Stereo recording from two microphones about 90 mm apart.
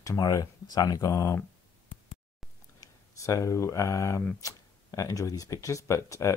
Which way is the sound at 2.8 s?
35° left (ahead or behind).